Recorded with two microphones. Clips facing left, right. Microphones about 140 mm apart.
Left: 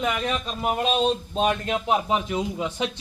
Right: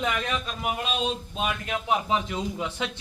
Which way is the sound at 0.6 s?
40° left (ahead or behind).